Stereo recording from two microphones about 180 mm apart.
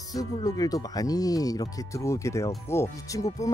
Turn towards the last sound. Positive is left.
turn(degrees=20)  # may be behind; listen again after turning